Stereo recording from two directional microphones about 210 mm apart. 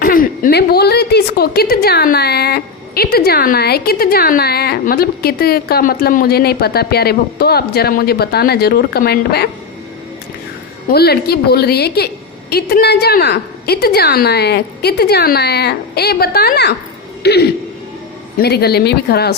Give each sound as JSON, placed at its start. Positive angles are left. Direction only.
{"t": 0.0, "sound": "a woman's voice", "side_deg": 45}
{"t": 10.9, "sound": "a woman's voice", "side_deg": 50}